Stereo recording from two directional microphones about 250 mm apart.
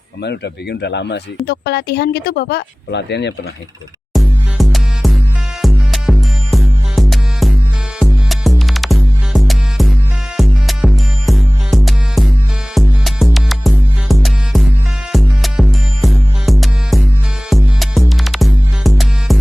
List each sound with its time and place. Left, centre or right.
0.2 s speech: left
4.1 s music: centre